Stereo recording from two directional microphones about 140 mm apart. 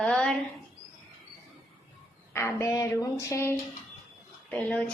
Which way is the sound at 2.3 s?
20° left (ahead or behind).